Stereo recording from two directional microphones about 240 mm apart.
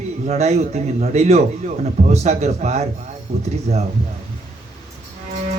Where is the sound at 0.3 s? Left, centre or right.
Right.